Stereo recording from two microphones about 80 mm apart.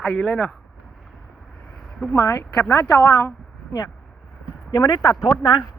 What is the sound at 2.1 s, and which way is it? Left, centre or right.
Speech, left.